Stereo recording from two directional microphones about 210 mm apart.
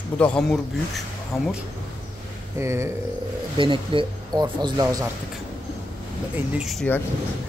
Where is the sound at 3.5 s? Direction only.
25° right (ahead or behind).